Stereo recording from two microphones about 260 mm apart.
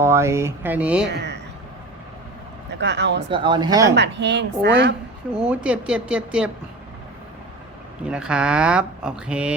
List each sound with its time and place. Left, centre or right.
0.0 s speech: centre
1.0 s speech: right
2.8 s speech: right
3.3 s speech: centre
3.9 s speech: right
5.5 s speech: centre
8.0 s speech: centre